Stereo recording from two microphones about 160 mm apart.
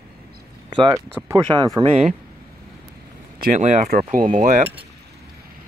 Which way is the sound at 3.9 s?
60° right (ahead or behind).